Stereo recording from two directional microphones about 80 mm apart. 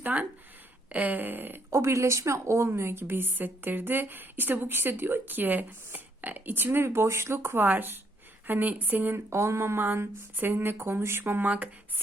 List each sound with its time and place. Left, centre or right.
0.0 s speech: centre